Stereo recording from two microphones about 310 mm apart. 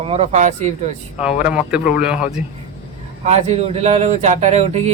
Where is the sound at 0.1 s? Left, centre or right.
Right.